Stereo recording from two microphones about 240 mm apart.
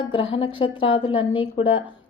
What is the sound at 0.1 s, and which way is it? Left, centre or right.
Speech, left.